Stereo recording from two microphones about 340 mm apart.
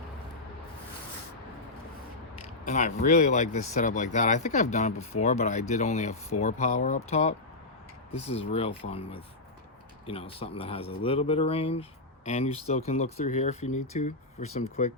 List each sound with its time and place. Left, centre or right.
2.6 s speech: left